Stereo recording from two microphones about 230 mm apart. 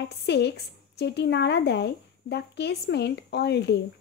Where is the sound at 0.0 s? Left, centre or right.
Left.